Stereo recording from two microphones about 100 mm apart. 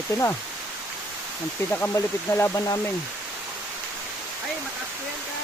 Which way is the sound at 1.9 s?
25° left (ahead or behind).